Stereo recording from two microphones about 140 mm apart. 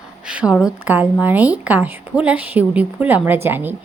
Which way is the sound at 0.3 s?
5° right (ahead or behind).